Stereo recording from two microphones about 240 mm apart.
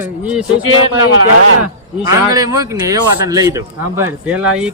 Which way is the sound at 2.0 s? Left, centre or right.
Centre.